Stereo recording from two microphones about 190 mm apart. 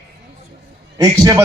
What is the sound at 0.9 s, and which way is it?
Speech, 20° right (ahead or behind).